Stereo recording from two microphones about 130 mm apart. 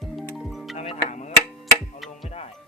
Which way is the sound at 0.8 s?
65° left (ahead or behind).